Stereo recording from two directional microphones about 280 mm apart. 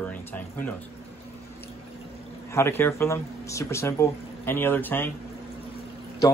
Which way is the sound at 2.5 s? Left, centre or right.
Centre.